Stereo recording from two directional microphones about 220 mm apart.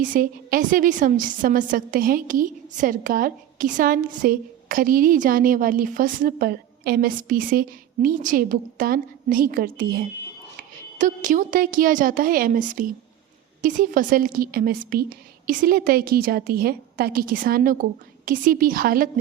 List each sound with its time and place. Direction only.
0.0 s a woman's voice: 40° right (ahead or behind)